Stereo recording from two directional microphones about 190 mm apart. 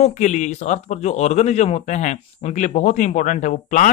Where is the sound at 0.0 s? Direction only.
40° left (ahead or behind).